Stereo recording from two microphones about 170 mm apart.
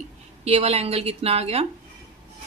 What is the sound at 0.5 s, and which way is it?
A woman's voice, 35° right (ahead or behind).